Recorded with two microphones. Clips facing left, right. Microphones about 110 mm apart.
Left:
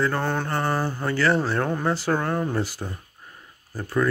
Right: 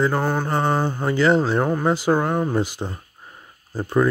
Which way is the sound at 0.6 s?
20° right (ahead or behind).